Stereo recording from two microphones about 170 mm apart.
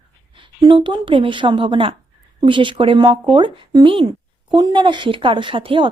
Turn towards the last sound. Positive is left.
turn(degrees=-30)  # may be behind; listen again after turning